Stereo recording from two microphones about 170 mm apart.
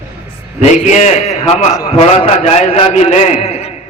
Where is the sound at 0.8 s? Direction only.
45° left (ahead or behind).